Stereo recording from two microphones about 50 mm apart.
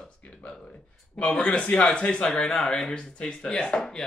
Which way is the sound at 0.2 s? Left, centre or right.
Left.